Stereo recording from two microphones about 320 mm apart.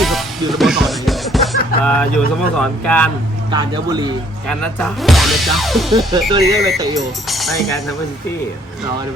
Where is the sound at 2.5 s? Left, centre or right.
Centre.